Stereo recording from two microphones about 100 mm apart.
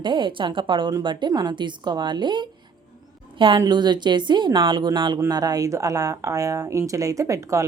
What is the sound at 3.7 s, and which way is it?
A woman's voice, 45° right (ahead or behind).